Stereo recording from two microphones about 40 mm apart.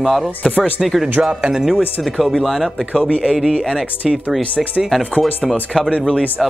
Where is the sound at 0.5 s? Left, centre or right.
Left.